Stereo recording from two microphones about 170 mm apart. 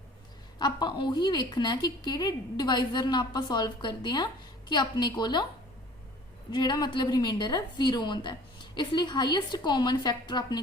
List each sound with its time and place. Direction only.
0.6 s a woman's voice: 25° left (ahead or behind)
6.5 s a woman's voice: 25° left (ahead or behind)